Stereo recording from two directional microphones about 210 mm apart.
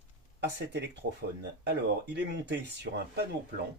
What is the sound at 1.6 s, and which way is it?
Speech, 55° right (ahead or behind).